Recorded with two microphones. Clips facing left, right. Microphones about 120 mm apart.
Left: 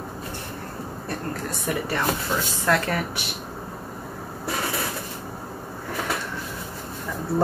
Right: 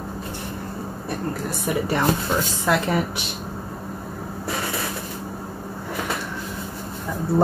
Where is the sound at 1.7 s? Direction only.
20° right (ahead or behind).